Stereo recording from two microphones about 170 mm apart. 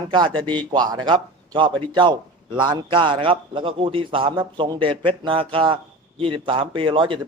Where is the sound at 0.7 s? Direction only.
25° right (ahead or behind).